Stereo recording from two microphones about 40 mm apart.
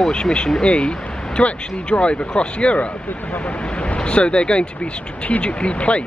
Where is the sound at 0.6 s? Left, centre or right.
Left.